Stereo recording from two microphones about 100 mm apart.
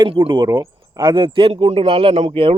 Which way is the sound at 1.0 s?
45° right (ahead or behind).